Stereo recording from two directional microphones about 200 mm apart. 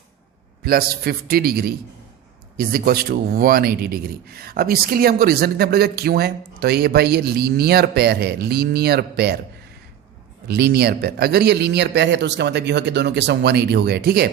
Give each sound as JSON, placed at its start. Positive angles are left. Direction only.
{"t": 0.6, "sound": "speech", "side_deg": -50}
{"t": 10.5, "sound": "a man's voice", "side_deg": -55}